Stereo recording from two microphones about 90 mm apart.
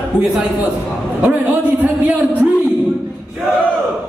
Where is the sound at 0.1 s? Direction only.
10° right (ahead or behind).